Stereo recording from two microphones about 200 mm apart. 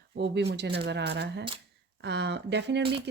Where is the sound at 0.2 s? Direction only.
60° right (ahead or behind).